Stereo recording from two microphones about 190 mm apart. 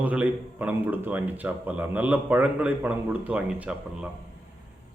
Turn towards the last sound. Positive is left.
turn(degrees=-5)  # may be behind; listen again after turning